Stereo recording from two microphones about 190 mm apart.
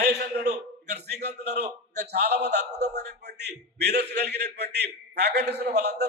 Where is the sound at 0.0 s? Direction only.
60° right (ahead or behind).